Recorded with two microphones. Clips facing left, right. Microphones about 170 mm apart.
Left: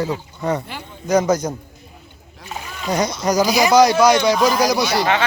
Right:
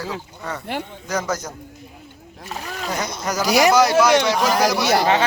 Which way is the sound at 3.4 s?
70° right (ahead or behind).